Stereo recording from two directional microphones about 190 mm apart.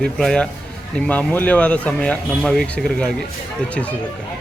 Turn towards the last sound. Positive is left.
turn(degrees=5)  # may be behind; listen again after turning